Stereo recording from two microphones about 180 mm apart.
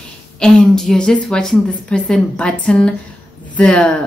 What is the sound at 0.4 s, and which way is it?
Speech, 5° left (ahead or behind).